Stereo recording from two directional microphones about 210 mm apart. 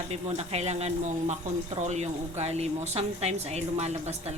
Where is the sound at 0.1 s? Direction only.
30° right (ahead or behind).